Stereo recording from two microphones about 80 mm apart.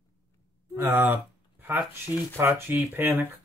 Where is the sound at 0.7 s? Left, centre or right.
Right.